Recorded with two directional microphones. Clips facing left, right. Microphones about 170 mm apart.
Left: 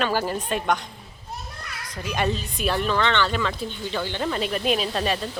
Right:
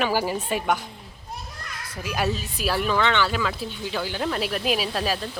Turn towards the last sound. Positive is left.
turn(degrees=0)  # may be behind; listen again after turning